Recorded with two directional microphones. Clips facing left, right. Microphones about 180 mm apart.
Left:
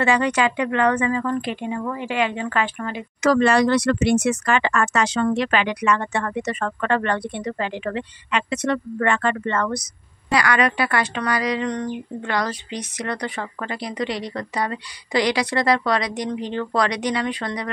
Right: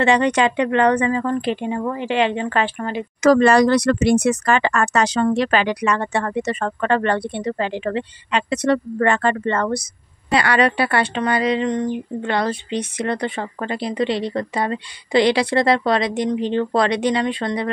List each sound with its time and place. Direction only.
0.0 s speech: 30° right (ahead or behind)